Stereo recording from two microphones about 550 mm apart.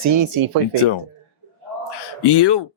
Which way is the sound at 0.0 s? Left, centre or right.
Right.